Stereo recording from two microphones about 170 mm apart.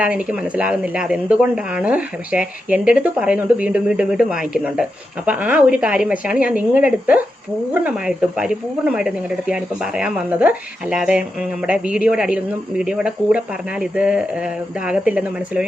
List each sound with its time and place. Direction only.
0.0 s speech: 5° right (ahead or behind)